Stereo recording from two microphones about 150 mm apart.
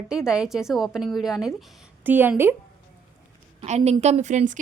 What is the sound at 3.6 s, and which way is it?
Speech, 45° right (ahead or behind).